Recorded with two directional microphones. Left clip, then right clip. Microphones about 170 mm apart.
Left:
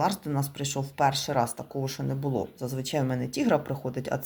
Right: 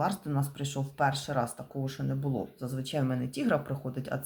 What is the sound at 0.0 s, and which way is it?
Speech, 20° left (ahead or behind).